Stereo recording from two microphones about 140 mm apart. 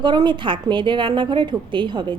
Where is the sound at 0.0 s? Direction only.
30° right (ahead or behind).